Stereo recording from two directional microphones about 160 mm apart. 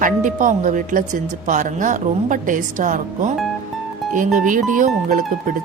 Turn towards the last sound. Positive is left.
turn(degrees=-55)  # may be behind; listen again after turning